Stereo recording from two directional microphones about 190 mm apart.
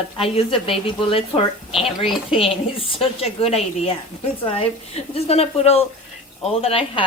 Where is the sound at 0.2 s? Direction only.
30° left (ahead or behind).